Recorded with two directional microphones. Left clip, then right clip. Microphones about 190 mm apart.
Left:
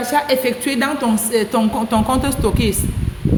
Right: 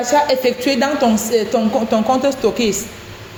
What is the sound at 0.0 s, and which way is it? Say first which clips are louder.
A woman's voice: right 2 dB; 45° left (ahead or behind).